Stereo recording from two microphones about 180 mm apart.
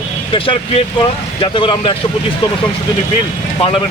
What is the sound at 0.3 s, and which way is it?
Speech, 30° left (ahead or behind).